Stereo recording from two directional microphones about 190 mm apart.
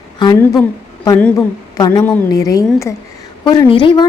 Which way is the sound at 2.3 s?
20° left (ahead or behind).